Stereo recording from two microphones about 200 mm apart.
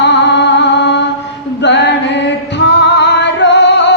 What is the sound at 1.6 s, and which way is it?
Music, 60° left (ahead or behind).